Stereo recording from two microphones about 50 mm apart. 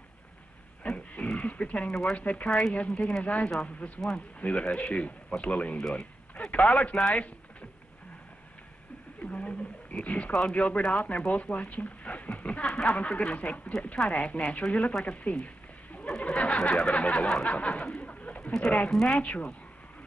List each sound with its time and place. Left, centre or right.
0.8 s pig: left
1.4 s speech: left
5.8 s speech: centre
6.3 s speech: left
9.2 s speech: left
12.6 s a sound: centre
12.9 s speech: left
15.0 s a sound: left
16.2 s speech: left
16.9 s speech: left
17.5 s a sound: left
18.9 s speech: centre
19.1 s speech: left